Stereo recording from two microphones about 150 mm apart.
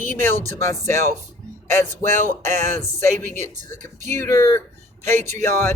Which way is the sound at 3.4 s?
50° right (ahead or behind).